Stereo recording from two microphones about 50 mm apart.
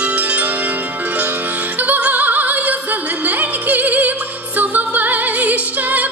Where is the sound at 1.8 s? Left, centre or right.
Right.